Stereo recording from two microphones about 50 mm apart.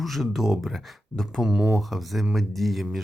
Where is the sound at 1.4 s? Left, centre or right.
Centre.